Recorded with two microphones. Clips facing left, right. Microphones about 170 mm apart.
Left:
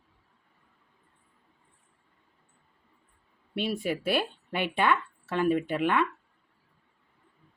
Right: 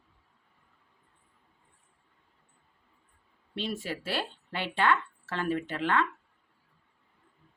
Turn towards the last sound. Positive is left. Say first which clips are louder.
# left 3 dB
turn(degrees=15)  # may be behind; listen again after turning